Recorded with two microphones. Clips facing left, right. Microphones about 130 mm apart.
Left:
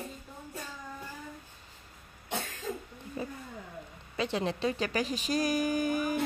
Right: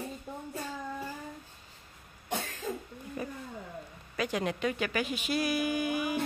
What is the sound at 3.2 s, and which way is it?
A woman's voice, 25° left (ahead or behind).